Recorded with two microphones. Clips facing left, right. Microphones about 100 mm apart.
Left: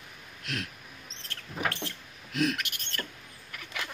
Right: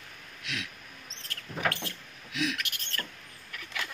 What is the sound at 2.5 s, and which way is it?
Rodents, 20° left (ahead or behind).